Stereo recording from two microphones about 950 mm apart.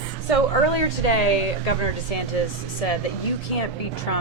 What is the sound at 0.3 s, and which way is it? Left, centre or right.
Speech, left.